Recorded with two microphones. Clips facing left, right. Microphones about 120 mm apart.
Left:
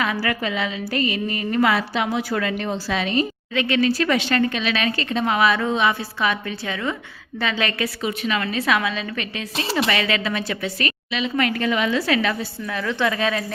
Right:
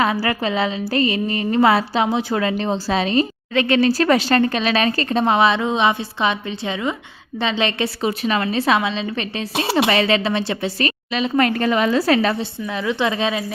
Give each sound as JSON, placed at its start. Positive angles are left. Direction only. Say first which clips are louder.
{"t": 0.0, "sound": "music", "louder": "right 4 dB", "side_deg": -30}
{"t": 7.3, "sound": "a woman's voice", "louder": "right 3 dB", "side_deg": -25}
{"t": 9.9, "sound": "music", "louder": "right 5 dB", "side_deg": -30}
{"t": 12.6, "sound": "a woman's voice", "louder": "right 2 dB", "side_deg": -20}